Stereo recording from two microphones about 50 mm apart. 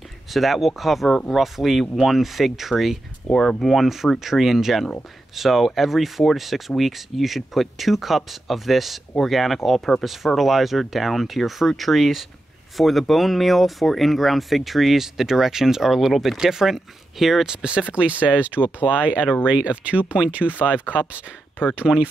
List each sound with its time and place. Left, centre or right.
0.3 s speech: centre
3.3 s speech: centre
3.6 s speech: centre
17.5 s speech: centre